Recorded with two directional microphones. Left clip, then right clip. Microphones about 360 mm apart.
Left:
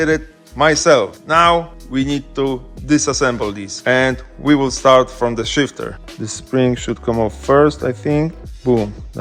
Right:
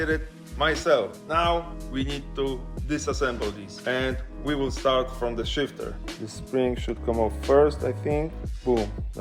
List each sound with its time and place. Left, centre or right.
0.6 s speech: centre
6.2 s speech: left